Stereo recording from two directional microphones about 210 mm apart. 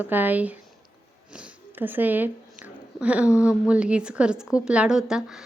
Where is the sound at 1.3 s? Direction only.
10° right (ahead or behind).